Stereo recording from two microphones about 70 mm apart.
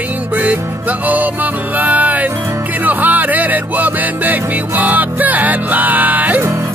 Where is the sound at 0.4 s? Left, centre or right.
Right.